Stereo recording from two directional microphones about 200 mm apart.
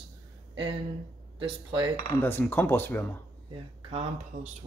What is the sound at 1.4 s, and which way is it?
Speech, 25° right (ahead or behind).